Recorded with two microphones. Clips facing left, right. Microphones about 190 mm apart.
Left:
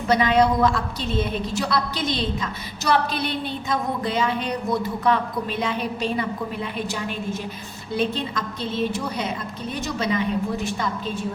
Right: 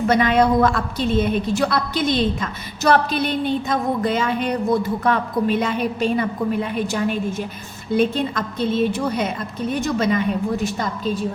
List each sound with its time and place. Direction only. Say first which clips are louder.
0.1 s a woman's voice: right 1 dB; 55° right (ahead or behind)